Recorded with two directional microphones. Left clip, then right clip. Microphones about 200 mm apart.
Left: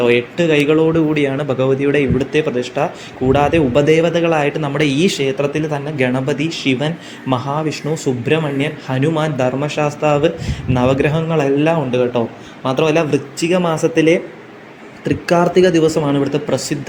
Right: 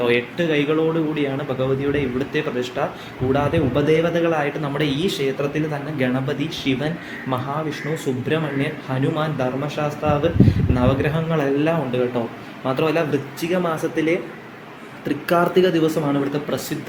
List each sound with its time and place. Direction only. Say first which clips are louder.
0.0 s a man's voice: left 5 dB; 25° left (ahead or behind)